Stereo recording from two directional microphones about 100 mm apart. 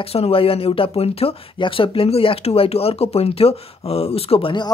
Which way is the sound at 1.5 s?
60° left (ahead or behind).